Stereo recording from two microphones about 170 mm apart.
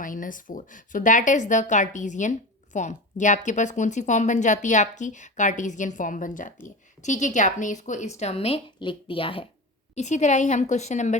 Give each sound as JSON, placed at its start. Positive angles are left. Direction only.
{"t": 0.0, "sound": "a woman's voice", "side_deg": 50}
{"t": 9.9, "sound": "a woman's voice", "side_deg": 45}